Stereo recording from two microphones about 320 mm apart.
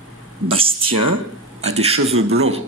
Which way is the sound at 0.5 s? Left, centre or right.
Centre.